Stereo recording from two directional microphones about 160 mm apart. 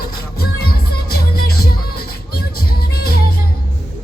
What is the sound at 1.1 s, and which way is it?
Music, 70° left (ahead or behind).